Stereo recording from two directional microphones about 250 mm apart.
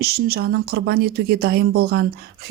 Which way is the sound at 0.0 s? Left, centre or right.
Right.